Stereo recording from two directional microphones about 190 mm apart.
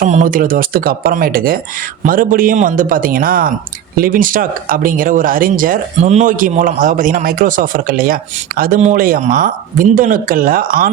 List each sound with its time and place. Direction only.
0.0 s speech: 40° right (ahead or behind)